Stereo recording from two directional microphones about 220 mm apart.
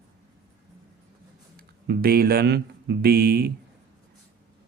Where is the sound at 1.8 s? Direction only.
45° right (ahead or behind).